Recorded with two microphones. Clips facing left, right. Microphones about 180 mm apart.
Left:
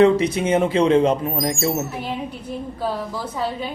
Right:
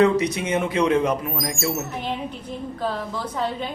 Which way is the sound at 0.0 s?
30° left (ahead or behind).